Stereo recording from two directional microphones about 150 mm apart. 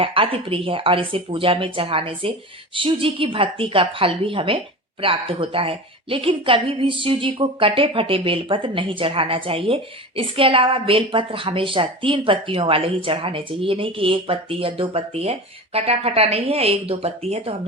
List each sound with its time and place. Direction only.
0.0 s a woman's voice: 35° right (ahead or behind)